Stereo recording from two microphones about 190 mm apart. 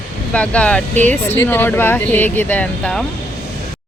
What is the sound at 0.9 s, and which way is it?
Speech, 40° right (ahead or behind).